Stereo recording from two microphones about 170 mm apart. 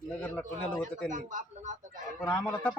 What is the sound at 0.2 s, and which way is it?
Speech, 10° left (ahead or behind).